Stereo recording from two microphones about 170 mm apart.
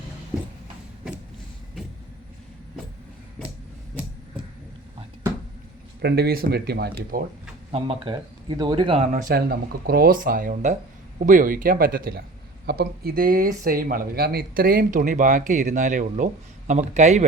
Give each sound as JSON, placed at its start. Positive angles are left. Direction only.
{"t": 6.0, "sound": "speech", "side_deg": -70}
{"t": 7.7, "sound": "speech", "side_deg": -35}
{"t": 9.1, "sound": "speech", "side_deg": -55}